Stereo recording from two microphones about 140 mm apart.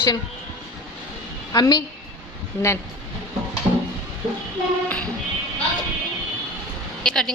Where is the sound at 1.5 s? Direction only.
30° left (ahead or behind).